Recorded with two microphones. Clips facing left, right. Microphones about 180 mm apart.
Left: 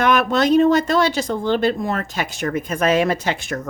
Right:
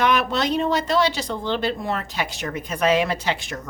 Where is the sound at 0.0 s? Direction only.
50° left (ahead or behind).